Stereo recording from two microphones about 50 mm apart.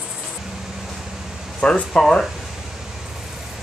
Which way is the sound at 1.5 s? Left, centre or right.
Centre.